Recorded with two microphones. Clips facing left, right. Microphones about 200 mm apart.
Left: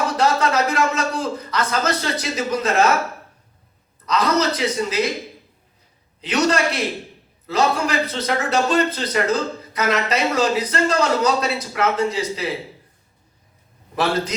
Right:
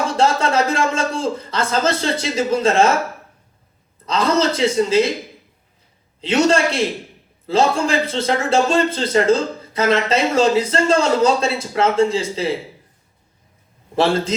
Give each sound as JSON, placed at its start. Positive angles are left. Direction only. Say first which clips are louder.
{"t": 0.1, "sound": "a man's voice", "louder": "right 2 dB", "side_deg": -25}
{"t": 4.0, "sound": "a man's voice", "louder": "right 2 dB", "side_deg": -25}
{"t": 6.2, "sound": "a man's voice", "louder": "right 4 dB", "side_deg": -25}
{"t": 13.9, "sound": "a man's voice", "louder": "right 4 dB", "side_deg": -25}